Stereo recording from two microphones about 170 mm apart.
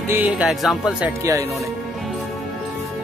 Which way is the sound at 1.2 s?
20° right (ahead or behind).